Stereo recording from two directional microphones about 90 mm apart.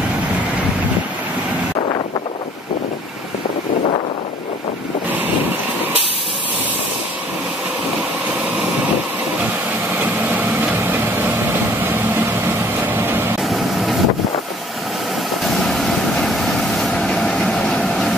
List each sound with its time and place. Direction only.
10.3 s vehicle: 20° right (ahead or behind)
12.8 s vehicle: 20° right (ahead or behind)
13.4 s vehicle: centre (ahead or behind)
15.4 s vehicle: centre (ahead or behind)